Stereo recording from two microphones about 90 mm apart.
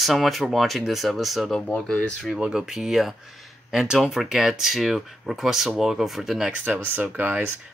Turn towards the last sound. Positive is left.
turn(degrees=-25)  # may be behind; listen again after turning